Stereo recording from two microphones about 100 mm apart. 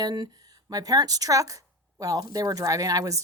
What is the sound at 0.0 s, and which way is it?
Speech, 45° right (ahead or behind).